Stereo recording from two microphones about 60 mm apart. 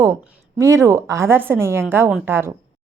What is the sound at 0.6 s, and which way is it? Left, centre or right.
A woman's voice, right.